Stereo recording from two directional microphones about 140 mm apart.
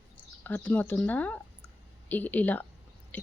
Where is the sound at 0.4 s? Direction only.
15° left (ahead or behind).